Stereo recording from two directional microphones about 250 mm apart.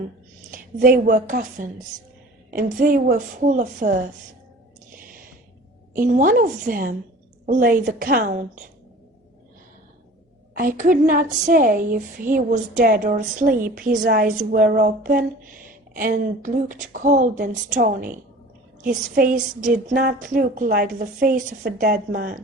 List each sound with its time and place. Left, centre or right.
0.5 s a woman's voice: right
5.9 s a woman's voice: right
10.6 s a woman's voice: right